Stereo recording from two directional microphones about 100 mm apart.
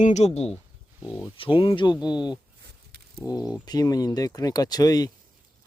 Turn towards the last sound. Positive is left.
turn(degrees=40)  # may be behind; listen again after turning